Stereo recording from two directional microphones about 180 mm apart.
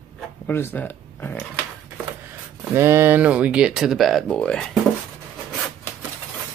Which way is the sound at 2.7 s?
15° right (ahead or behind).